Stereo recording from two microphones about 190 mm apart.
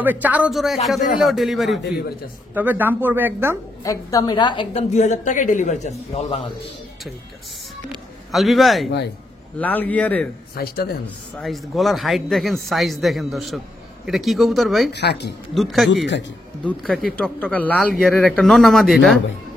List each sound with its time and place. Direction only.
0.0 s speech: 10° right (ahead or behind)
3.8 s a woman's voice: 15° left (ahead or behind)
4.9 s a man's voice: 40° left (ahead or behind)
8.3 s speech: centre (ahead or behind)
10.5 s speech: 55° left (ahead or behind)
11.3 s speech: centre (ahead or behind)
14.9 s speech: 60° left (ahead or behind)
15.5 s speech: centre (ahead or behind)